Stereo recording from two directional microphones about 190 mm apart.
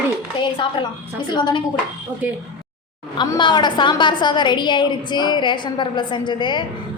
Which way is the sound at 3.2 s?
25° left (ahead or behind).